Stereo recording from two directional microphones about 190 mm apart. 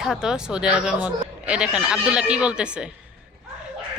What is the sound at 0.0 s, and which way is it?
Speech, 5° right (ahead or behind).